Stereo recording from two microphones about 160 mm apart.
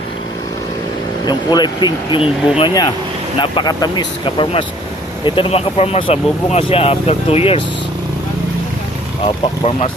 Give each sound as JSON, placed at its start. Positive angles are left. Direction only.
{"t": 1.2, "sound": "speech", "side_deg": 25}
{"t": 9.2, "sound": "speech", "side_deg": 35}